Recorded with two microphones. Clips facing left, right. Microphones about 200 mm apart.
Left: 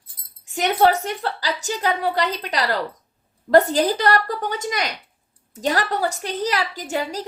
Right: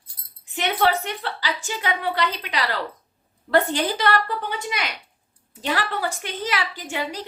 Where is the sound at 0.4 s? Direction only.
45° left (ahead or behind).